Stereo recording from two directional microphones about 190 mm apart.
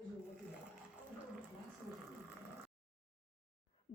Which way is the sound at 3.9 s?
35° left (ahead or behind).